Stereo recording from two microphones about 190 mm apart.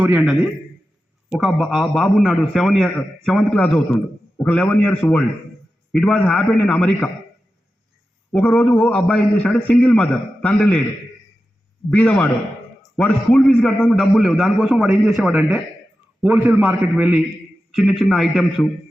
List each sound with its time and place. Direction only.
0.0 s a man's voice: 5° right (ahead or behind)
8.3 s a man's voice: 5° left (ahead or behind)
11.9 s a man's voice: 5° left (ahead or behind)